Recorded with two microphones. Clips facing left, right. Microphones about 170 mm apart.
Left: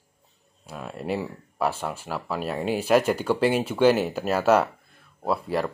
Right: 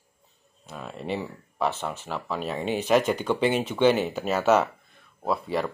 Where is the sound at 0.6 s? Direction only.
5° left (ahead or behind).